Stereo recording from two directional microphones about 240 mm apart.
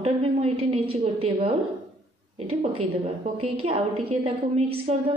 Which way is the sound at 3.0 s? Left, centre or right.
Right.